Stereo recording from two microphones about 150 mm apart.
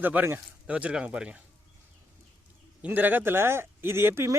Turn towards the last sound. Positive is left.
turn(degrees=-15)  # may be behind; listen again after turning